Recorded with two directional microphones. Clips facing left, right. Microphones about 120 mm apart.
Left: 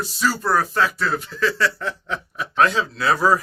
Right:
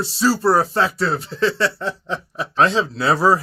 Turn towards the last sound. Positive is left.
turn(degrees=-30)  # may be behind; listen again after turning